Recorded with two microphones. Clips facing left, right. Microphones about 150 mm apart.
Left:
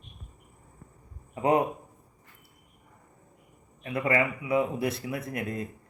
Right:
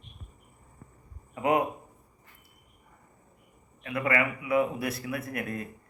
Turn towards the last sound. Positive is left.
turn(degrees=25)  # may be behind; listen again after turning